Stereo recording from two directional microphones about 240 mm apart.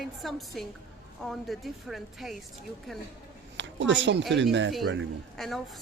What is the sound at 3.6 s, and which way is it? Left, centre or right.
Speech, right.